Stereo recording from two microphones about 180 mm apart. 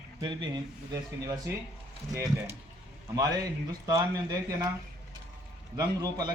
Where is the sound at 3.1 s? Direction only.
20° right (ahead or behind).